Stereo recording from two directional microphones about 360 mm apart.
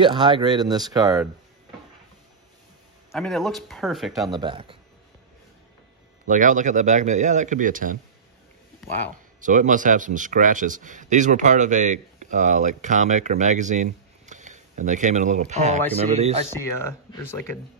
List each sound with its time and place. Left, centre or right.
0.0 s speech: centre
3.1 s speech: centre
4.3 s speech: centre
6.2 s a man's voice: right
9.4 s a man's voice: right
16.5 s speech: centre